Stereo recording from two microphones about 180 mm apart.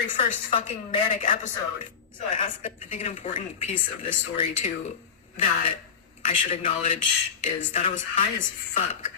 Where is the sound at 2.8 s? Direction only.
40° left (ahead or behind).